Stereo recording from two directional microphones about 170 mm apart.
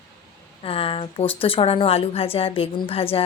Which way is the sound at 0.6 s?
35° left (ahead or behind).